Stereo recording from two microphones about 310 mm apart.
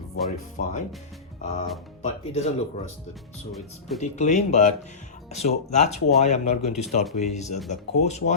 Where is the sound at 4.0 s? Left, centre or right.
Left.